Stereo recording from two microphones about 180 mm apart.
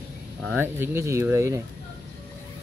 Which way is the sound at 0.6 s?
15° right (ahead or behind).